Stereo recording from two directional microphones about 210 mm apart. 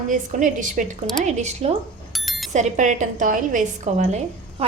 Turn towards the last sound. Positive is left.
turn(degrees=-35)  # may be behind; listen again after turning